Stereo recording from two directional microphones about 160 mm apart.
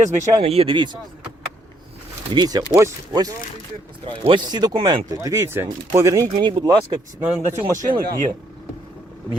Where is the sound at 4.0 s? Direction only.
35° right (ahead or behind).